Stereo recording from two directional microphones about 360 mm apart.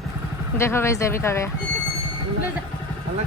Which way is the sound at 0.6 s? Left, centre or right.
Centre.